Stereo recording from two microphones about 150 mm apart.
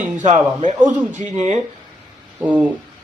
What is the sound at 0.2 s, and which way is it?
Speech, 50° right (ahead or behind).